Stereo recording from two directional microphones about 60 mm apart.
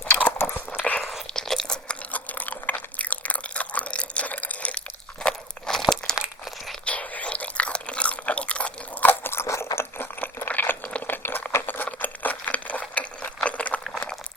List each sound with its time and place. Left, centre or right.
0.2 s biting: left
1.3 s biting: centre
5.2 s crunch: centre
6.8 s chewing: left
9.0 s crunch: left
9.7 s a sound: left
11.9 s crumpling: left
12.9 s a sound: left